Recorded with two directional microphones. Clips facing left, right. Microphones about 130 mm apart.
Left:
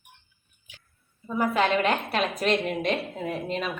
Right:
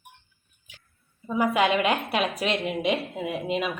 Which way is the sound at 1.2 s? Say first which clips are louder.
Right 2 dB; 10° right (ahead or behind).